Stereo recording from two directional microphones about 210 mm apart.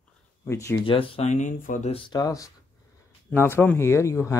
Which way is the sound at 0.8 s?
25° left (ahead or behind).